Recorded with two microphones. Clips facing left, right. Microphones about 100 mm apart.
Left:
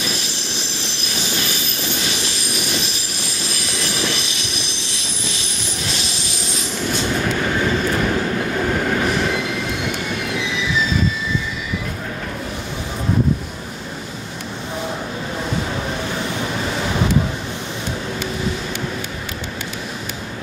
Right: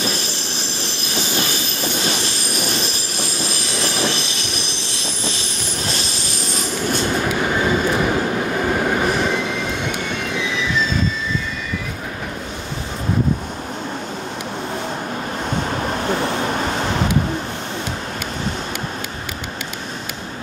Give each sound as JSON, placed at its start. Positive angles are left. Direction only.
{"t": 0.0, "sound": "train", "side_deg": -40}
{"t": 2.0, "sound": "vehicle", "side_deg": -40}
{"t": 3.8, "sound": "train", "side_deg": -35}
{"t": 5.9, "sound": "train", "side_deg": -40}
{"t": 7.2, "sound": "train", "side_deg": -15}
{"t": 9.1, "sound": "train", "side_deg": 0}